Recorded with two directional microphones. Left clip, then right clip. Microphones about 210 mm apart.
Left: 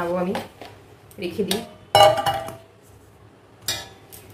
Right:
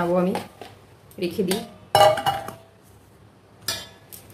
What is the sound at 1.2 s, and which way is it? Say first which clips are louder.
Speech: right 2 dB; 45° right (ahead or behind).